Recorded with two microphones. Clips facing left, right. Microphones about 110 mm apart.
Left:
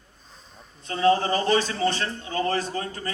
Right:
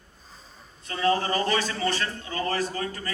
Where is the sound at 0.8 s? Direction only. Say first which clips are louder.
Left 4 dB; 25° left (ahead or behind).